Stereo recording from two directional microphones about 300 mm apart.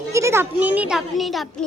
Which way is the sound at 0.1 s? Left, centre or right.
Centre.